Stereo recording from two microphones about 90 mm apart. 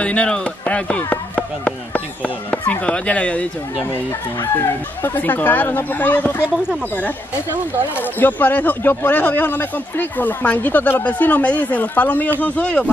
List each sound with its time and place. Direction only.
0.0 s speech: 15° left (ahead or behind)
5.0 s speech: 20° left (ahead or behind)
8.2 s speech: 20° left (ahead or behind)